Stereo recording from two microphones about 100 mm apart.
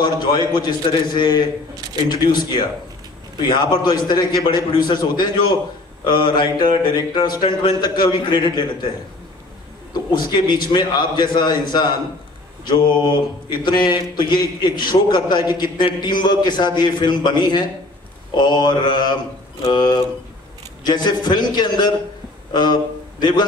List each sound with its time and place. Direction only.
0.0 s a man's voice: 45° left (ahead or behind)
10.1 s a man's voice: 50° left (ahead or behind)
13.0 s a man's voice: 50° left (ahead or behind)